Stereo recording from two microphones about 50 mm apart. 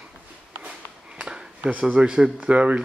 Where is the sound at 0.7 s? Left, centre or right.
Centre.